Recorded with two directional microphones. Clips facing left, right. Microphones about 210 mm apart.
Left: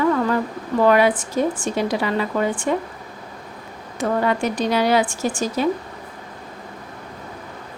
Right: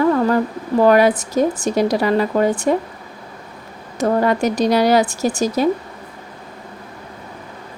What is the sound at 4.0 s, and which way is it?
A woman's voice, 40° right (ahead or behind).